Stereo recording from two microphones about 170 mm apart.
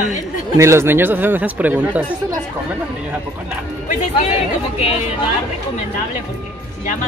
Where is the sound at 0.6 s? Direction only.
15° right (ahead or behind).